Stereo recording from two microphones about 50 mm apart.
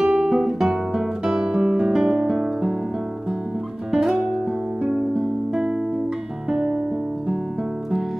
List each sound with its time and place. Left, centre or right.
0.0 s music: centre
0.4 s guitar: centre
2.0 s music: centre
3.9 s guitar: centre
6.5 s music: centre